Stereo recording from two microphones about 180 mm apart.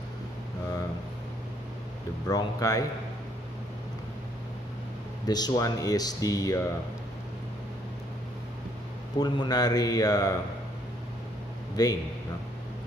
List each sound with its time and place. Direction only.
2.2 s speech: 20° left (ahead or behind)
5.2 s speech: 20° left (ahead or behind)
9.2 s speech: 20° left (ahead or behind)
11.7 s a man's voice: 20° left (ahead or behind)